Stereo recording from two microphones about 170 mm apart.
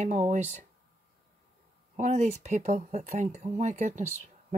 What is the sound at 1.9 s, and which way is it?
Speech, 40° right (ahead or behind).